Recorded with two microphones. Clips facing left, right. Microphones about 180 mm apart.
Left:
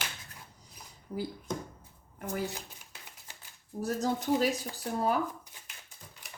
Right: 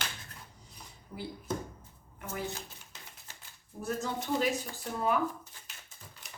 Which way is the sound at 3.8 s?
35° left (ahead or behind).